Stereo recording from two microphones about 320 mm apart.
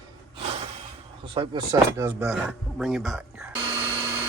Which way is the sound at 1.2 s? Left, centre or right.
Centre.